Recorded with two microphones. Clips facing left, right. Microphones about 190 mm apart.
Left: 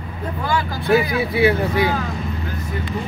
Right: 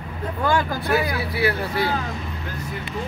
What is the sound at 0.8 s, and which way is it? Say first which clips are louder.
A man's voice: left 5 dB; 20° left (ahead or behind).